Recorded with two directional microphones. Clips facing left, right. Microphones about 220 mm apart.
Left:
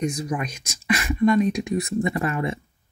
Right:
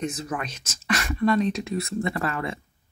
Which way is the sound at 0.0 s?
15° left (ahead or behind).